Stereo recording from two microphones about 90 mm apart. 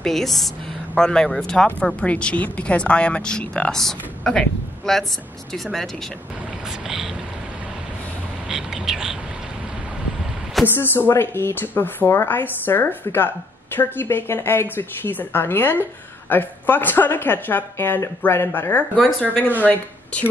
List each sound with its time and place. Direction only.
0.0 s a woman's voice: 5° left (ahead or behind)
8.5 s a sound: 5° right (ahead or behind)
10.8 s speech: 25° left (ahead or behind)